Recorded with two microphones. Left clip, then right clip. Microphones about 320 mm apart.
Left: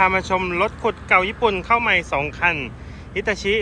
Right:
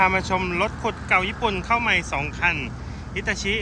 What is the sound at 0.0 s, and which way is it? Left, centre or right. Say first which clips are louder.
Speech: left 2 dB; centre.